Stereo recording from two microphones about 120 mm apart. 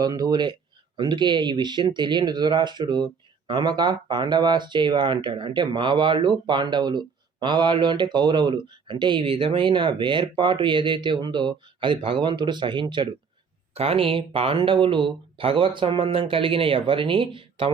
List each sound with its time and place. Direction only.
0.0 s speech: 35° right (ahead or behind)
13.7 s speech: 55° right (ahead or behind)